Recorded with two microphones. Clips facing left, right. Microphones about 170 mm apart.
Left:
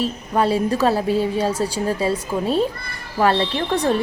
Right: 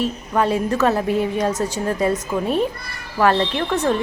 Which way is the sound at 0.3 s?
35° left (ahead or behind).